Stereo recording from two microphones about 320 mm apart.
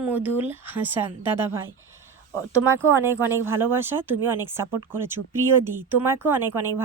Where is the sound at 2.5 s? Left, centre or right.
Centre.